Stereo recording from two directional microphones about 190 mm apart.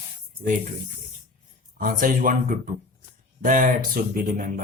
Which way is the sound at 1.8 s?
45° right (ahead or behind).